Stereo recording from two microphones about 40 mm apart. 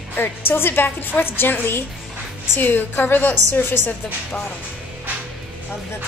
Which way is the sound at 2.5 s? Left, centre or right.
Left.